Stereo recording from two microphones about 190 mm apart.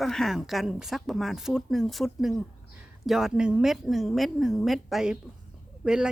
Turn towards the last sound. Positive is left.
turn(degrees=-5)  # may be behind; listen again after turning